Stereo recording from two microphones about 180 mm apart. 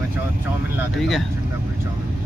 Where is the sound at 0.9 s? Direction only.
Centre (ahead or behind).